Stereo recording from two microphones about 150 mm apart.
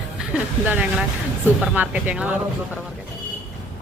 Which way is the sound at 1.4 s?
10° right (ahead or behind).